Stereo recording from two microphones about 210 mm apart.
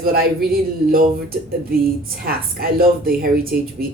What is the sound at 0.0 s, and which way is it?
Speech, 45° right (ahead or behind).